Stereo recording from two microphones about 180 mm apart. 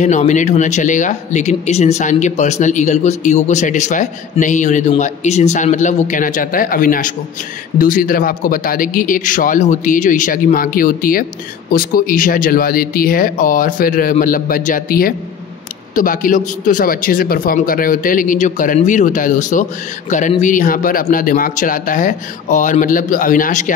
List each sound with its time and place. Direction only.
0.0 s speech: 45° left (ahead or behind)